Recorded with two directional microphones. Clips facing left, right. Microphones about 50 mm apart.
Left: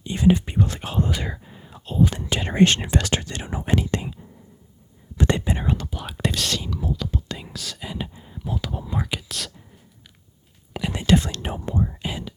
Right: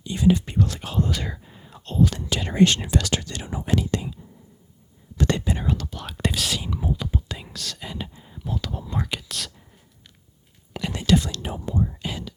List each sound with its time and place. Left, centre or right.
0.0 s speech: left; by 2.0 s centre
2.0 s speech: centre
2.3 s speech: left
3.9 s whispering: left
5.1 s whispering: left
6.3 s speech: centre
6.7 s speech: centre
7.2 s whispering: centre
10.8 s whispering: centre
11.0 s speech: left
11.9 s whispering: centre